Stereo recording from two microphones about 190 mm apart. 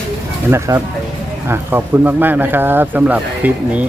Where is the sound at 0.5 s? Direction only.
15° right (ahead or behind).